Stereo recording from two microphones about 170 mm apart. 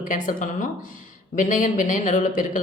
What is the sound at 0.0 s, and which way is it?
Speech, 50° left (ahead or behind).